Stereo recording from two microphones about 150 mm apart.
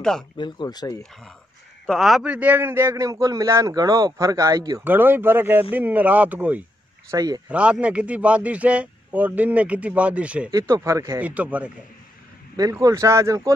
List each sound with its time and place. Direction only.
0.4 s speech: 30° left (ahead or behind)
1.9 s a man's voice: centre (ahead or behind); by 4.8 s 25° right (ahead or behind)
4.8 s a man's voice: 15° right (ahead or behind)
7.1 s a man's voice: 25° right (ahead or behind)
7.4 s a man's voice: 10° right (ahead or behind)
10.5 s a man's voice: 20° right (ahead or behind)
12.5 s a man's voice: 25° right (ahead or behind)